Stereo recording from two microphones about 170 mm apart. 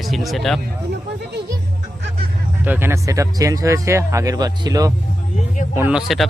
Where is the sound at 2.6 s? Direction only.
10° right (ahead or behind).